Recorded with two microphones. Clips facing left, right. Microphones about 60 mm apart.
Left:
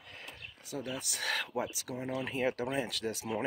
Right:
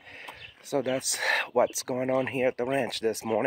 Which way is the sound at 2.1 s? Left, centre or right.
Right.